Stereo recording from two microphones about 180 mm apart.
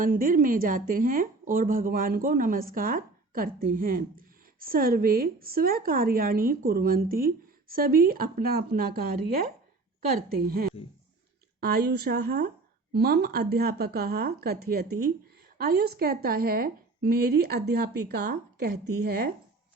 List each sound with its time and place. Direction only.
0.0 s a woman's voice: 50° right (ahead or behind)